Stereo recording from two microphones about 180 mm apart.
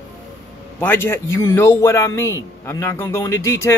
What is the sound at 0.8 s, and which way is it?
A man's voice, 10° left (ahead or behind).